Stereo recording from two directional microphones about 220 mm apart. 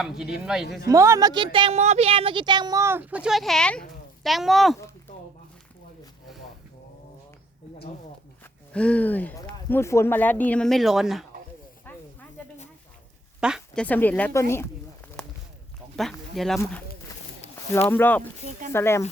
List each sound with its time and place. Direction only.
0.0 s speech: 5° right (ahead or behind)
0.9 s a woman's voice: 15° right (ahead or behind)
8.7 s speech: 5° left (ahead or behind)
13.4 s speech: centre (ahead or behind)
16.0 s speech: centre (ahead or behind)
17.4 s a sound: 30° left (ahead or behind)
17.9 s speech: 10° left (ahead or behind)